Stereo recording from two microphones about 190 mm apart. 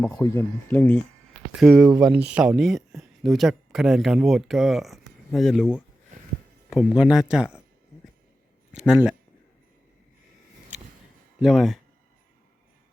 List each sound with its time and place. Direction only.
0.0 s speech: 20° left (ahead or behind)
1.5 s speech: 5° right (ahead or behind)
6.1 s a sound: 45° right (ahead or behind)
6.7 s speech: centre (ahead or behind)
8.7 s speech: 5° right (ahead or behind)
11.3 s speech: centre (ahead or behind)